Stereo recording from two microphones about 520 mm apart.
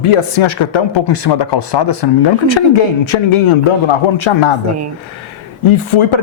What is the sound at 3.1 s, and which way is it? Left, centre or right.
Speech, left.